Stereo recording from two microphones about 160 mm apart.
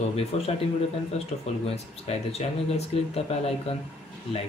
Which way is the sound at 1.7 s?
40° left (ahead or behind).